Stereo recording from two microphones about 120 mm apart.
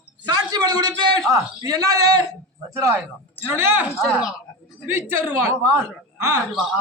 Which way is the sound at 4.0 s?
Centre (ahead or behind).